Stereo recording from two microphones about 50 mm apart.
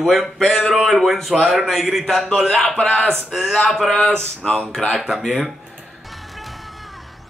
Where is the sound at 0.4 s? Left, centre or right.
Centre.